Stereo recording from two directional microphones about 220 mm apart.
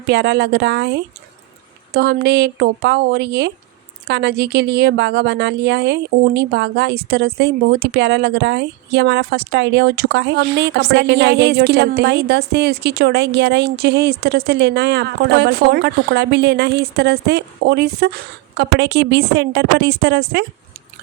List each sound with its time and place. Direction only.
0.1 s a woman's voice: 50° right (ahead or behind)